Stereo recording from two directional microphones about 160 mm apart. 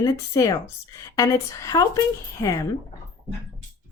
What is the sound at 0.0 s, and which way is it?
A woman's voice, 20° left (ahead or behind).